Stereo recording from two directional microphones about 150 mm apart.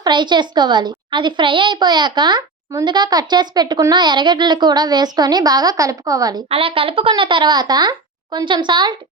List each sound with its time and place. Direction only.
0.0 s a woman's voice: 30° right (ahead or behind)
6.5 s a woman's voice: 40° right (ahead or behind)